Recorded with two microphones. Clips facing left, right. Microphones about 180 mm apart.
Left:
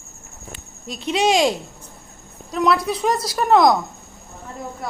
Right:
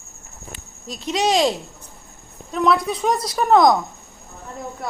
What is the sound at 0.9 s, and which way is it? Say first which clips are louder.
Speech: left 2 dB; 25° left (ahead or behind).